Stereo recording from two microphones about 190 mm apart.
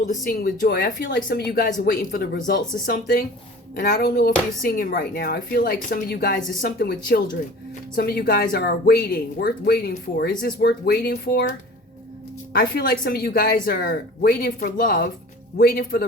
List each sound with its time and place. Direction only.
0.7 s a woman's voice: 55° left (ahead or behind)
12.5 s a woman's voice: 50° left (ahead or behind)